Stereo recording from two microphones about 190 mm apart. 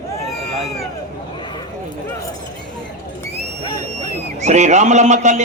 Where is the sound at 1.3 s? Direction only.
25° left (ahead or behind).